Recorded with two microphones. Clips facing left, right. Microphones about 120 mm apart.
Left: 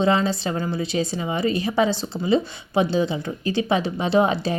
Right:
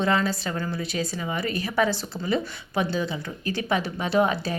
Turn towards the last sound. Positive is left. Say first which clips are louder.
# left 3 dB
turn(degrees=25)  # may be behind; listen again after turning